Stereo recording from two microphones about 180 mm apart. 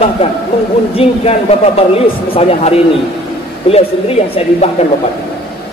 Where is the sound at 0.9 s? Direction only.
35° left (ahead or behind).